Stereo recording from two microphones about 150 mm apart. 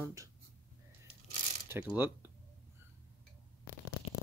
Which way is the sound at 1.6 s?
10° right (ahead or behind).